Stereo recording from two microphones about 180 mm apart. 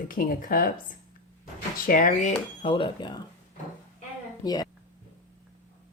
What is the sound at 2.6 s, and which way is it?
Speech, 30° left (ahead or behind).